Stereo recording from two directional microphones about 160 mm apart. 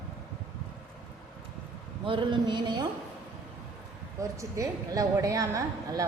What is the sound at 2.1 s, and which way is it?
Speech, 30° right (ahead or behind).